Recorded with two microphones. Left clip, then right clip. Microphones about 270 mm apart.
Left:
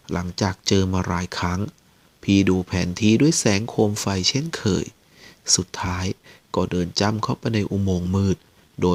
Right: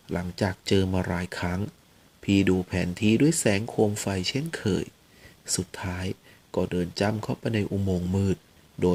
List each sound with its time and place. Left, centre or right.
0.1 s speech: left